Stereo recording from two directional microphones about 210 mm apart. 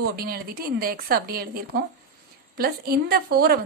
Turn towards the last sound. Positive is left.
turn(degrees=-45)  # may be behind; listen again after turning